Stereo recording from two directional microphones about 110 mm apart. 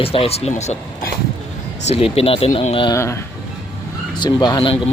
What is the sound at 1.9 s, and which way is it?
Speech, 65° left (ahead or behind).